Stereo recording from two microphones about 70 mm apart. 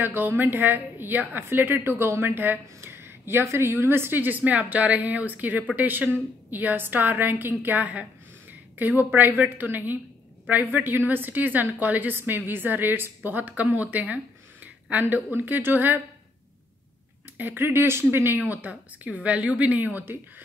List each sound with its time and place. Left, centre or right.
0.0 s a woman's voice: right
17.4 s a woman's voice: right